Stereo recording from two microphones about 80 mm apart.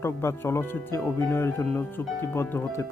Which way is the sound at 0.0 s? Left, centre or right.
Left.